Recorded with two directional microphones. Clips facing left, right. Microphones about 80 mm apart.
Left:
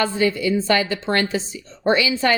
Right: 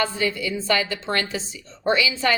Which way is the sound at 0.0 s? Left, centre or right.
Left.